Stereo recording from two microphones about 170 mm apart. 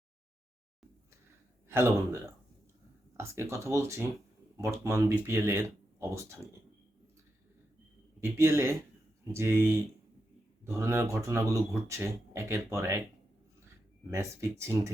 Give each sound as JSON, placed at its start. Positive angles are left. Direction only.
{"t": 1.6, "sound": "a man's voice", "side_deg": -15}
{"t": 3.2, "sound": "speech", "side_deg": -15}
{"t": 8.2, "sound": "speech", "side_deg": -15}
{"t": 14.6, "sound": "speech", "side_deg": -15}